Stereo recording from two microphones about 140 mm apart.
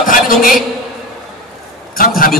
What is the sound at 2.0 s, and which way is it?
Speech, 90° left.